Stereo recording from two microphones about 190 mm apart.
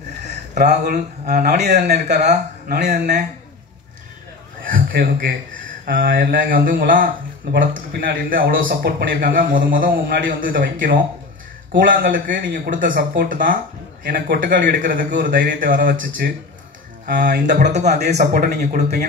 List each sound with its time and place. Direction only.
0.6 s a man's voice: 55° right (ahead or behind)
2.9 s speech: 40° right (ahead or behind)
4.6 s a sound: 50° right (ahead or behind)
5.9 s a man's voice: 50° right (ahead or behind)
17.2 s a man's voice: 45° right (ahead or behind)